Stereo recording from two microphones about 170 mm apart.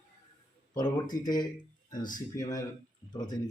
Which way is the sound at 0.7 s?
25° left (ahead or behind).